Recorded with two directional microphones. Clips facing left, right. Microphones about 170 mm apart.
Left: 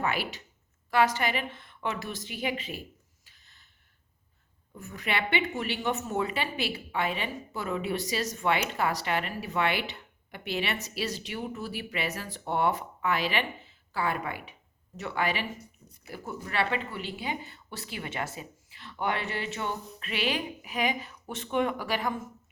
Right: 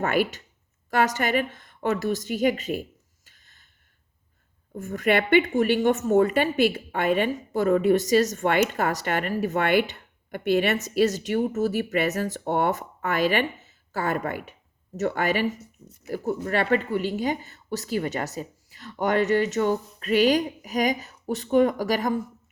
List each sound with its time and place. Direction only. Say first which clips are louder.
0.0 s speech: right 7 dB; 50° right (ahead or behind)
3.2 s a sound: right 2 dB; 50° right (ahead or behind)
4.7 s speech: right 10 dB; 50° right (ahead or behind)